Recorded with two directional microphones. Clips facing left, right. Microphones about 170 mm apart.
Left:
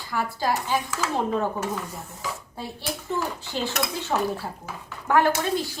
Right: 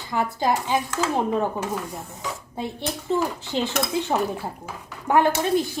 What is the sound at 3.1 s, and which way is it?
Speech, 20° right (ahead or behind).